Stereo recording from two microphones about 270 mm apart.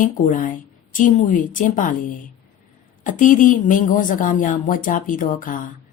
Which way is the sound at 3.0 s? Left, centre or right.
Left.